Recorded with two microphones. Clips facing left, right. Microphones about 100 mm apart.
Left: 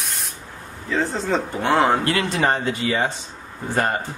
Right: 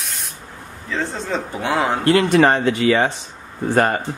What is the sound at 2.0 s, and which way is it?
Speech, 40° right (ahead or behind).